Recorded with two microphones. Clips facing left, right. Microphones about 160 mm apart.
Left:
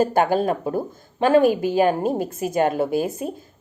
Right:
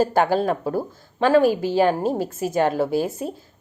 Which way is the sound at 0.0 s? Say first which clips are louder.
Even; 15° left (ahead or behind).